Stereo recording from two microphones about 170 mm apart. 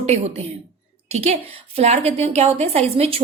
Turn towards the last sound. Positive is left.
turn(degrees=-35)  # may be behind; listen again after turning